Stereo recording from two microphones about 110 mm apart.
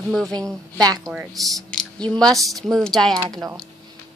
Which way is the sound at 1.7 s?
10° left (ahead or behind).